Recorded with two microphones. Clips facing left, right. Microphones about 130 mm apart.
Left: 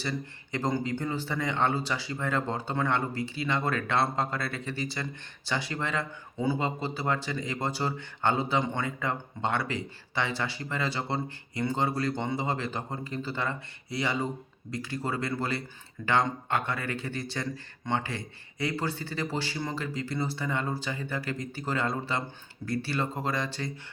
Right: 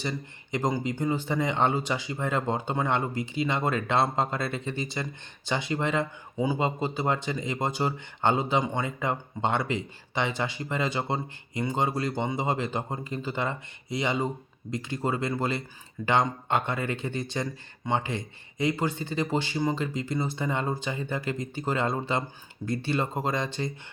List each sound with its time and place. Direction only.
0.0 s speech: 20° right (ahead or behind)